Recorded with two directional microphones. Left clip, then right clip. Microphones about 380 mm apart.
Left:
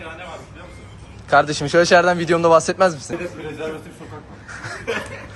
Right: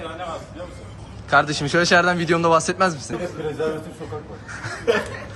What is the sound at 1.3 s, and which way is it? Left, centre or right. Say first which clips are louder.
A man's voice: left 2 dB; centre.